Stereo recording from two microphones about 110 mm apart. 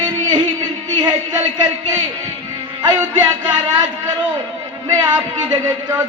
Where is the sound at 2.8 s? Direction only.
40° right (ahead or behind).